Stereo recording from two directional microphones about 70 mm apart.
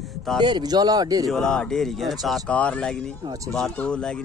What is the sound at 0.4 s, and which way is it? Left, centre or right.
Speech, right.